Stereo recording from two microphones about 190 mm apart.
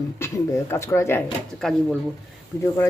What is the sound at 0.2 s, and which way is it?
Speech, 15° left (ahead or behind).